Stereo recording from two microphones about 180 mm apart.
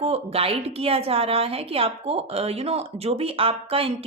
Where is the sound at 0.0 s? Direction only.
35° right (ahead or behind).